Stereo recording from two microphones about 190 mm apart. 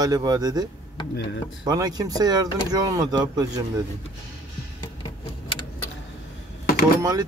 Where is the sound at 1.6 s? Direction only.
20° right (ahead or behind).